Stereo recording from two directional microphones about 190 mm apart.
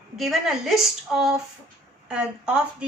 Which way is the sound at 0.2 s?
Centre (ahead or behind).